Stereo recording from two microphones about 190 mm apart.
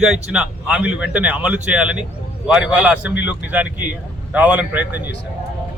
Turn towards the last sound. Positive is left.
turn(degrees=-10)  # may be behind; listen again after turning